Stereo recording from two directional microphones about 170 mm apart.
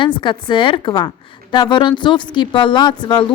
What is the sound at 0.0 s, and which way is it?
A woman's voice, 30° left (ahead or behind).